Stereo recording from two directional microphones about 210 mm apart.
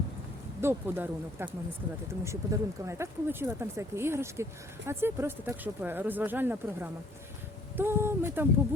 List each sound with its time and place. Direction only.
0.6 s speech: 10° right (ahead or behind)